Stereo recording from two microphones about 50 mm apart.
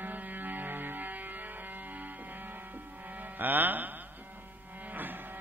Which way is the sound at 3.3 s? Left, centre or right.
Right.